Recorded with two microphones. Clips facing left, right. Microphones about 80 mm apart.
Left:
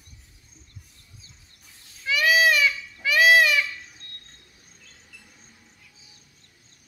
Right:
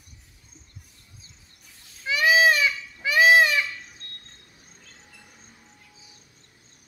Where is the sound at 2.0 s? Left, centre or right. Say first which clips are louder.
Right 1 dB; right.